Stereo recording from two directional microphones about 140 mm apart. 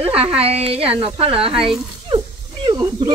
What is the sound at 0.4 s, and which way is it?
Speech, 45° right (ahead or behind).